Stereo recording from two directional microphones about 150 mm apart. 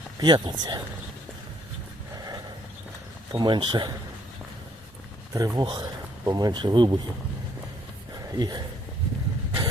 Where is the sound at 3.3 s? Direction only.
30° right (ahead or behind).